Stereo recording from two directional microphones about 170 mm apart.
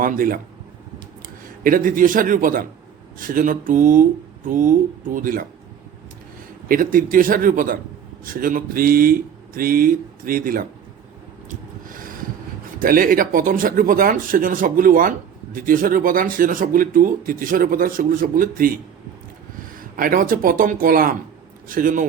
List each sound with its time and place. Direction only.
0.0 s speech: 55° right (ahead or behind)
1.6 s a man's voice: 55° right (ahead or behind)
6.7 s speech: 55° right (ahead or behind)
11.4 s a sound: 55° right (ahead or behind)
12.8 s speech: 55° right (ahead or behind)
20.0 s a man's voice: 55° right (ahead or behind)